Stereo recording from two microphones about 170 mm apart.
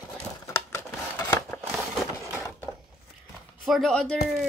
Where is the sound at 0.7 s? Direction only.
10° left (ahead or behind).